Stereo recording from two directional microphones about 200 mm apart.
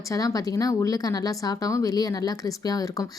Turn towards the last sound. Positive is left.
turn(degrees=15)  # may be behind; listen again after turning